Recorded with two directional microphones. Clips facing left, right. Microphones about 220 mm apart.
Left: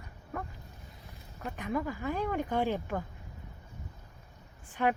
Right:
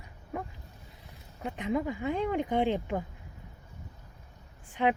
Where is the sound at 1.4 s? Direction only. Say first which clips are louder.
Right 3 dB; 15° right (ahead or behind).